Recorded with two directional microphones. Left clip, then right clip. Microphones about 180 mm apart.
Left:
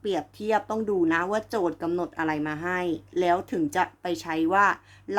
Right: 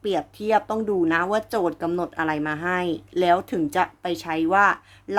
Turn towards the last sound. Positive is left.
turn(degrees=-15)  # may be behind; listen again after turning